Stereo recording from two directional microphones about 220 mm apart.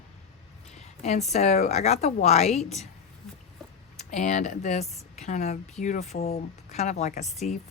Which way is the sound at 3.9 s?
35° left (ahead or behind).